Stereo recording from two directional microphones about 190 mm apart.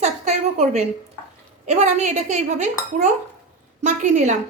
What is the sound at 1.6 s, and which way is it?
A child's voice, 40° right (ahead or behind).